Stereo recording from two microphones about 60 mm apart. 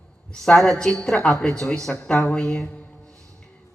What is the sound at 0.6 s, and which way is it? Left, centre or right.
Speech, centre.